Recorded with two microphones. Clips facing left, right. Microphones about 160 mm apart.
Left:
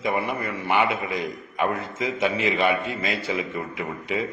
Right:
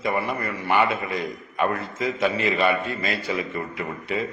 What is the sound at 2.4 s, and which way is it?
A man's voice, 5° left (ahead or behind).